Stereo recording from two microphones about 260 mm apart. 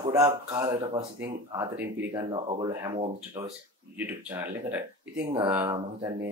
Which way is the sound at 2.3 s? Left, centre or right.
Centre.